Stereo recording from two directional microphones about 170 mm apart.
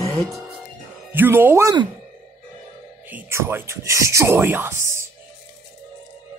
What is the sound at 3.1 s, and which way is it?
Speech, 10° right (ahead or behind).